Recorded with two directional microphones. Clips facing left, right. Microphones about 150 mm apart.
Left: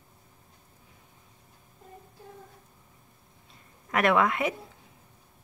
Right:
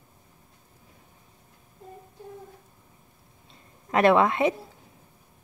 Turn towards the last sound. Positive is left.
turn(degrees=-25)  # may be behind; listen again after turning